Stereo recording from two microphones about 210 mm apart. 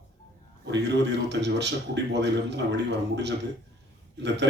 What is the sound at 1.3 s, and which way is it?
A man's voice, 55° right (ahead or behind).